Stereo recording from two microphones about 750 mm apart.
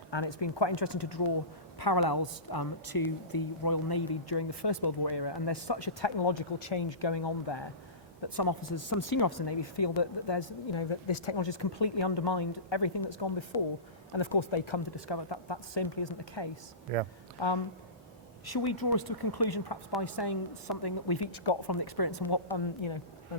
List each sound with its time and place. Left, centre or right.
0.1 s a woman's voice: left
16.9 s speech: right
17.4 s a woman's voice: left